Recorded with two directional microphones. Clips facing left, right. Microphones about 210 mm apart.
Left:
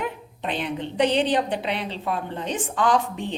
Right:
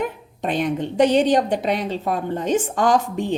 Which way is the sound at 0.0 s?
45° right (ahead or behind).